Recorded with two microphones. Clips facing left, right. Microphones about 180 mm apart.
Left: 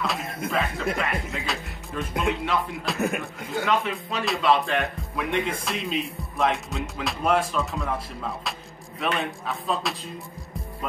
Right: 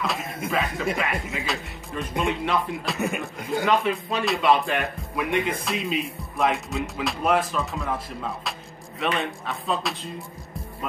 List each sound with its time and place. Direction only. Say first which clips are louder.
0.0 s speech: even; centre (ahead or behind)